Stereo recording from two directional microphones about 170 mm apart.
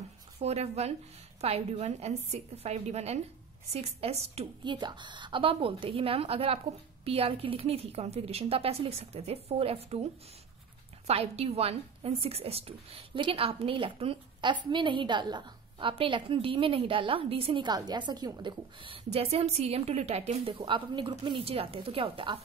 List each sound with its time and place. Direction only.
0.4 s a woman's voice: 40° right (ahead or behind)
11.1 s a woman's voice: 35° right (ahead or behind)